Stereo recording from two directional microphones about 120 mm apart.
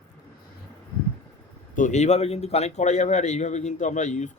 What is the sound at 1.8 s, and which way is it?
Speech, 80° left.